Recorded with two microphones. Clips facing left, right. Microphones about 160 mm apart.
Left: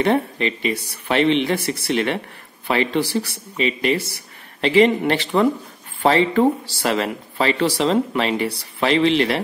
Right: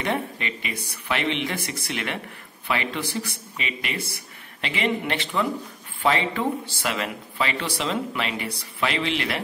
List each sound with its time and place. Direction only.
0.0 s speech: 35° left (ahead or behind)